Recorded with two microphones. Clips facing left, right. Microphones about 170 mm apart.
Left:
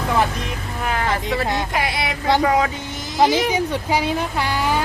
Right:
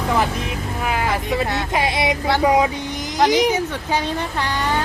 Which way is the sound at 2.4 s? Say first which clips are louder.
Right 2 dB; 15° right (ahead or behind).